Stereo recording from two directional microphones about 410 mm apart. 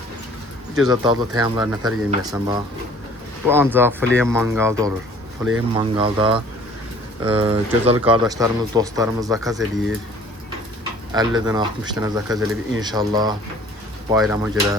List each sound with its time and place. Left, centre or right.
0.8 s speech: centre
11.1 s speech: centre